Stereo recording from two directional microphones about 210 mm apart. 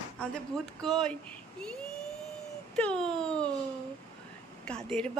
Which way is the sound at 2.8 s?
5° left (ahead or behind).